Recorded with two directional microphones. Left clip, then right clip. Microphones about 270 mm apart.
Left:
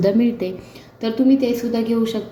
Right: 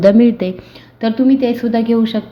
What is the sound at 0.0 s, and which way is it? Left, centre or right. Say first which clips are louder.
A woman's voice: right 8 dB; right.